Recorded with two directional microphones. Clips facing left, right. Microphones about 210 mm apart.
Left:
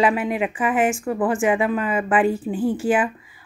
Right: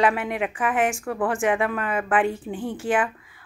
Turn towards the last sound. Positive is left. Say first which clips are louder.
# left 3 dB
turn(degrees=5)  # may be behind; listen again after turning